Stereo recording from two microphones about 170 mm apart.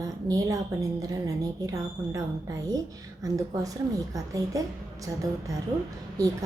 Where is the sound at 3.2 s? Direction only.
20° right (ahead or behind).